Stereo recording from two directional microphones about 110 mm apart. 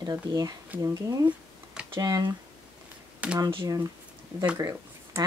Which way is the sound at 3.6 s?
30° right (ahead or behind).